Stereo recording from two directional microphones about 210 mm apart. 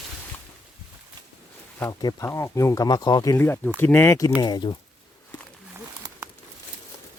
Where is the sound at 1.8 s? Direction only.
15° left (ahead or behind).